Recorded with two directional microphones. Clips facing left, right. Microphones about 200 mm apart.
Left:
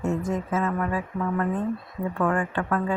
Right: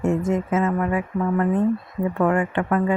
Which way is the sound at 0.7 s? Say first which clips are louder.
Right 4 dB; 15° right (ahead or behind).